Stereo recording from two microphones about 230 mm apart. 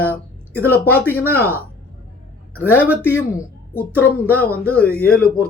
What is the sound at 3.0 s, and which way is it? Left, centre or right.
Speech, centre.